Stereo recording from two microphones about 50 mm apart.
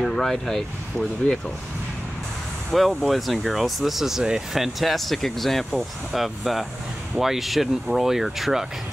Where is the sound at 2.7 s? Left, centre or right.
Centre.